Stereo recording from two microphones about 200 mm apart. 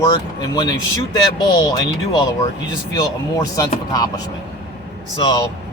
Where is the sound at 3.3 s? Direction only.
15° left (ahead or behind).